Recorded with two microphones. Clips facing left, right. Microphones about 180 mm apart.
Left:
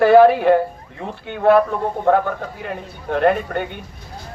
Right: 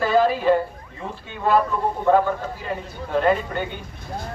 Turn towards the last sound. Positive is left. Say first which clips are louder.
# left 3 dB
turn(degrees=60)  # may be behind; listen again after turning